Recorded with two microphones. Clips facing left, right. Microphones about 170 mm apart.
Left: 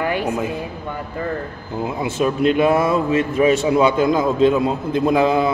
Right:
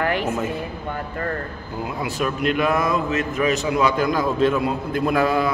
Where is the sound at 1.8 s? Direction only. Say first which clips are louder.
Left 5 dB; 25° left (ahead or behind).